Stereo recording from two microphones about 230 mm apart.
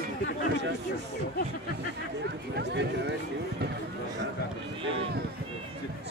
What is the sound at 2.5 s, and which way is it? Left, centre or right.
Speech, right.